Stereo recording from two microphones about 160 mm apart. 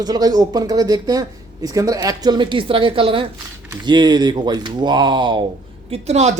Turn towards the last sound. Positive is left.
turn(degrees=-40)  # may be behind; listen again after turning